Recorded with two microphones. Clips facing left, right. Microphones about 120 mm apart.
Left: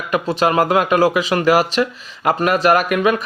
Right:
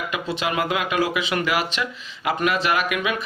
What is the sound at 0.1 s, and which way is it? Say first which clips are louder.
Speech: left 12 dB; 40° left (ahead or behind).